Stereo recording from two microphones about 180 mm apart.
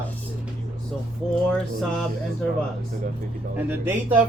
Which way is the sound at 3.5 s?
10° right (ahead or behind).